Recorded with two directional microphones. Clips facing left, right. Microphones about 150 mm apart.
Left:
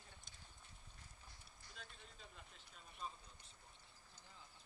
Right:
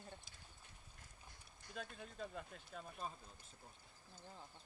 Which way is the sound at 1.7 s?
55° right (ahead or behind).